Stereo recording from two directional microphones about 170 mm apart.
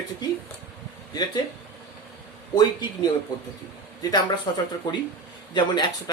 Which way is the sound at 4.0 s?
20° left (ahead or behind).